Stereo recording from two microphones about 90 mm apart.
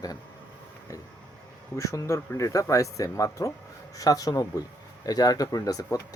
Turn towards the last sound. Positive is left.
turn(degrees=35)  # may be behind; listen again after turning